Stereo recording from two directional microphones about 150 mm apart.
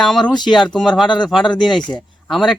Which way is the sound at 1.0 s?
30° left (ahead or behind).